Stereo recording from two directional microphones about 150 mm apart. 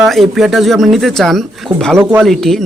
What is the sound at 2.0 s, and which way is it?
Speech, 15° right (ahead or behind).